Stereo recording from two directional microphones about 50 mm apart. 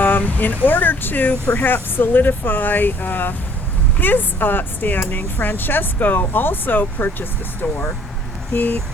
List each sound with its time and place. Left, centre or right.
0.0 s speech: left
8.5 s speech: left